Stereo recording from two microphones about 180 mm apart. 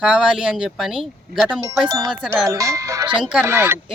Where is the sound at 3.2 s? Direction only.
5° right (ahead or behind).